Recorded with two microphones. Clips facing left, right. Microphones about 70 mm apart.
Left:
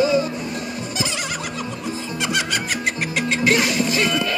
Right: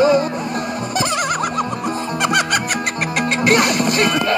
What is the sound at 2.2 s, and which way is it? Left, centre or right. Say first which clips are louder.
Music: right 6 dB; right.